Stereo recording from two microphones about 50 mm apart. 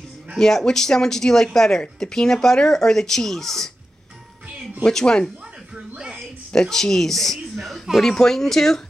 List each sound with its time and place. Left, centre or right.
0.4 s speech: centre
4.8 s speech: centre
5.8 s music: centre
6.5 s speech: centre